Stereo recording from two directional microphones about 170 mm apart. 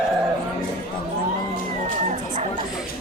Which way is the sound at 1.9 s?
50° right (ahead or behind).